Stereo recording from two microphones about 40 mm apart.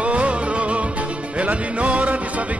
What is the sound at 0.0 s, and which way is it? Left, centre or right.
Music, right.